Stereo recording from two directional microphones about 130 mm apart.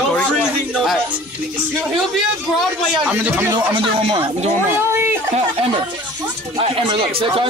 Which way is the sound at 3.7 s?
45° right (ahead or behind).